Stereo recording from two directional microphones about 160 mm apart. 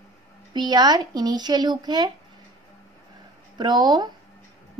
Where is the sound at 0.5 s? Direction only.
25° right (ahead or behind).